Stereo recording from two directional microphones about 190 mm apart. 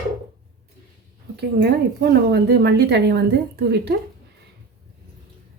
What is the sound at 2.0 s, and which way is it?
A woman's voice, 60° right (ahead or behind).